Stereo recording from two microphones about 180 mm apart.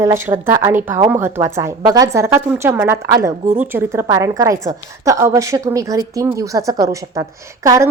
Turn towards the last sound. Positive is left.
turn(degrees=-15)  # may be behind; listen again after turning